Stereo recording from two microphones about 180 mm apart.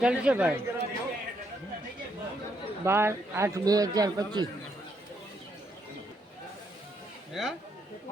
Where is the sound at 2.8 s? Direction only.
15° right (ahead or behind).